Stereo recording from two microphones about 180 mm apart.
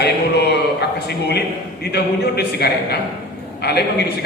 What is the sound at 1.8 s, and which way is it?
A man's voice, 65° left (ahead or behind).